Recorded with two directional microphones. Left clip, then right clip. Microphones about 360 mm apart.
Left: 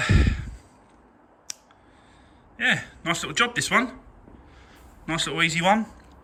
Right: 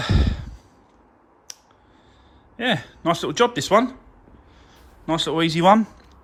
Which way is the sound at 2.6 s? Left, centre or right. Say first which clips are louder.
Even; centre.